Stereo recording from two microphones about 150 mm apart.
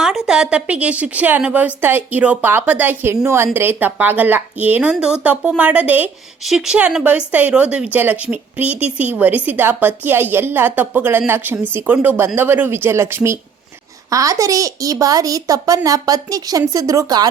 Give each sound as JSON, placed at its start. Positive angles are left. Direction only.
{"t": 0.0, "sound": "a woman's voice", "side_deg": -5}